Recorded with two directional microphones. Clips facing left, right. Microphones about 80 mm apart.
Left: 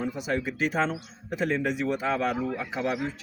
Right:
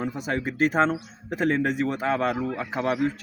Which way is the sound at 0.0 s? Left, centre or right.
Right.